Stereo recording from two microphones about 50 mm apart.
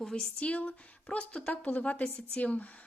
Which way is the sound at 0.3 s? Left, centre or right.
Left.